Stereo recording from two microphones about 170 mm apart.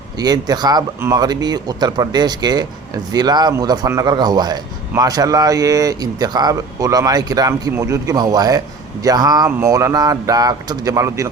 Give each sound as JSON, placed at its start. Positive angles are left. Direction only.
{"t": 0.2, "sound": "speech", "side_deg": -25}